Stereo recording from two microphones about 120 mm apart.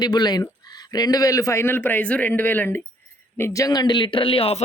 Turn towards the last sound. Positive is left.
turn(degrees=50)  # may be behind; listen again after turning